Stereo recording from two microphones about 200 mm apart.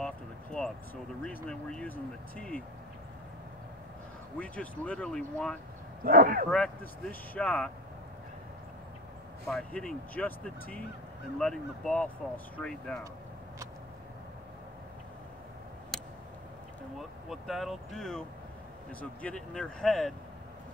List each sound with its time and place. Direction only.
0.0 s a sound: 5° left (ahead or behind)
1.2 s speech: 5° left (ahead or behind)
4.4 s speech: 5° left (ahead or behind)
6.0 s speech: 45° right (ahead or behind)
6.5 s speech: 5° left (ahead or behind)
9.5 s speech: 5° left (ahead or behind)
15.9 s a sound: centre (ahead or behind)
17.3 s speech: centre (ahead or behind)
19.2 s speech: 5° left (ahead or behind)